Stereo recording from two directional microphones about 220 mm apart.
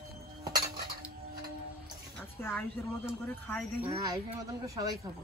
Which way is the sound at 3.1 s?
10° left (ahead or behind).